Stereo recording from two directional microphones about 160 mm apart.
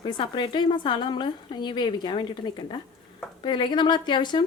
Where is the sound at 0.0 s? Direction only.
30° left (ahead or behind).